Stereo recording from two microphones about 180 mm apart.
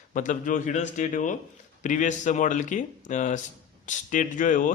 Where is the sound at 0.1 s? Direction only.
45° left (ahead or behind).